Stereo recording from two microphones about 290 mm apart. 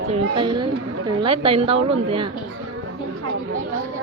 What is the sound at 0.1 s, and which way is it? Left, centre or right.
A woman's voice, centre.